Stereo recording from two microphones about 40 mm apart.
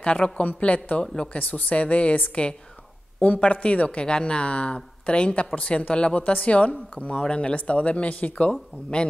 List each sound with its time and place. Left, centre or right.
0.0 s a woman's voice: left